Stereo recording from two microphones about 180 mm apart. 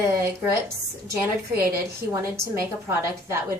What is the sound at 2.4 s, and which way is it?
A woman's voice, 15° right (ahead or behind).